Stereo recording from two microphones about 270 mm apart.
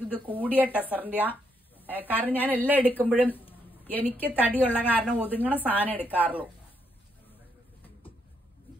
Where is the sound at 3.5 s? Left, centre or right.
Centre.